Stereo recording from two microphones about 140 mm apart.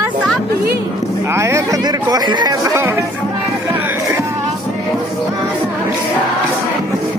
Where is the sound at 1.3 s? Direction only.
20° right (ahead or behind).